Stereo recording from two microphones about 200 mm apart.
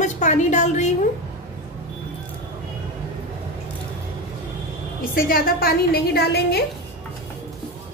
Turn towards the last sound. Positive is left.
turn(degrees=55)  # may be behind; listen again after turning